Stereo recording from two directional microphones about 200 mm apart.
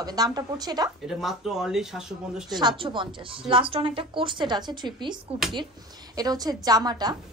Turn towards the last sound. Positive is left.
turn(degrees=-20)  # may be behind; listen again after turning